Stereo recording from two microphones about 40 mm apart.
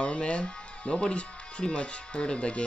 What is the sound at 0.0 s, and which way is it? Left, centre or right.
Speech, left.